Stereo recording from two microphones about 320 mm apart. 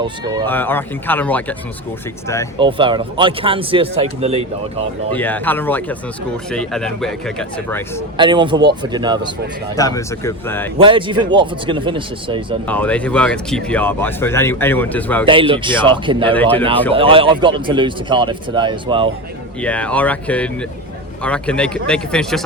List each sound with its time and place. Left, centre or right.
0.0 s speech: centre
0.4 s speech: centre
2.6 s speech: centre
5.1 s speech: centre
8.1 s speech: centre
9.7 s speech: centre
10.8 s speech: centre
12.6 s speech: centre
15.3 s speech: centre
16.3 s speech: centre
16.9 s speech: centre
19.6 s speech: centre